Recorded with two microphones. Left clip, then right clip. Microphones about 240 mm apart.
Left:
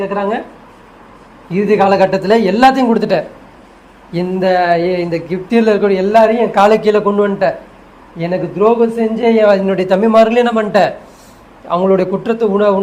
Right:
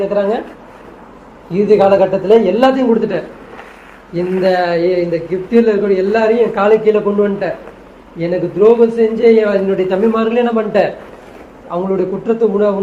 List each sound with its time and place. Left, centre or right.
0.0 s speech: left
1.5 s speech: left
8.2 s speech: left